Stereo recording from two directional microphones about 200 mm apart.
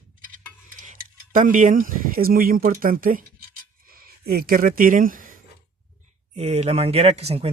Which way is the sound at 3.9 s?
50° right (ahead or behind).